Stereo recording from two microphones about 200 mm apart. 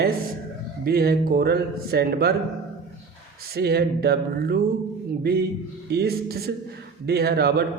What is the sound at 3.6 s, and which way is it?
A man's voice, 55° right (ahead or behind).